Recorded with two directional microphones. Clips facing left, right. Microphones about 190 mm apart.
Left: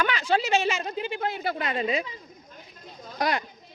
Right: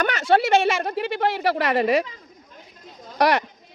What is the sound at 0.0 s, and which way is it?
A woman's voice, 50° right (ahead or behind).